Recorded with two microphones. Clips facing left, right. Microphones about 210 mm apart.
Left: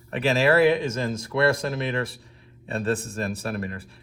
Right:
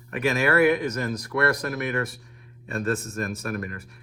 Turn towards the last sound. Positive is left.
turn(degrees=30)  # may be behind; listen again after turning